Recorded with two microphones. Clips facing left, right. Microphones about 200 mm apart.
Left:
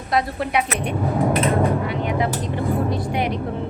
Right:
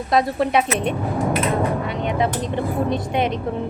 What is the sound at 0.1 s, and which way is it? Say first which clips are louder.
Speech: right 3 dB; 25° right (ahead or behind).